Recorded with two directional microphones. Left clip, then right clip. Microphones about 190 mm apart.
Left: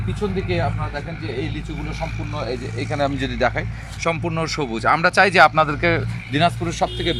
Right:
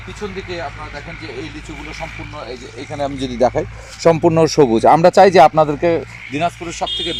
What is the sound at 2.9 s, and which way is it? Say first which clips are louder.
Speech: even; 10° right (ahead or behind).